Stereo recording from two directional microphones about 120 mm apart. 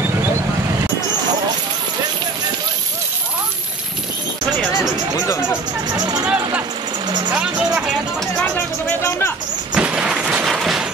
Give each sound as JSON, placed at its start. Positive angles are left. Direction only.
{"t": 5.9, "sound": "speech", "side_deg": -35}
{"t": 7.3, "sound": "speech", "side_deg": -10}
{"t": 8.8, "sound": "speech", "side_deg": 20}
{"t": 9.8, "sound": "a sound", "side_deg": -10}